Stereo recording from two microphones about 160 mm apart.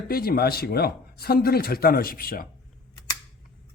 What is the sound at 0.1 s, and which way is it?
Speech, 70° left (ahead or behind).